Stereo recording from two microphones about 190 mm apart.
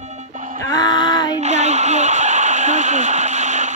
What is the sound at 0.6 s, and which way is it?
Music, 20° left (ahead or behind).